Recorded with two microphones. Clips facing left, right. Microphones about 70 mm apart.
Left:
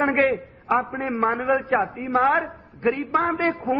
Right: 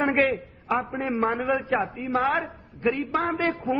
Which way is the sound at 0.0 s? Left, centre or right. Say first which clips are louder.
Left 2 dB; left.